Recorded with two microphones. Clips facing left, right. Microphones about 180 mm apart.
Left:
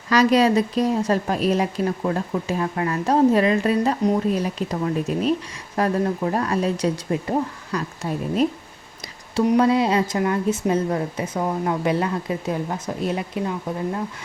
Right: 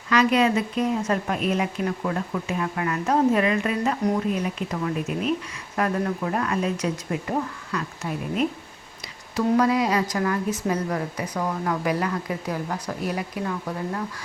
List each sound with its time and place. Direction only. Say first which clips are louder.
0.1 s a woman's voice: left 3 dB; 35° left (ahead or behind)
9.3 s a woman's voice: left 3 dB; 25° left (ahead or behind)